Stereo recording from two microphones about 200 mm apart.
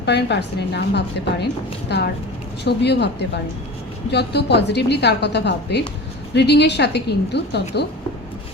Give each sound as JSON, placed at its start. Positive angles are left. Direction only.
{"t": 0.0, "sound": "a woman's voice", "side_deg": 60}